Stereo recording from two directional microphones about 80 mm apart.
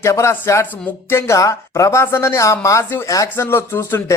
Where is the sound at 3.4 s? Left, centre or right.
Left.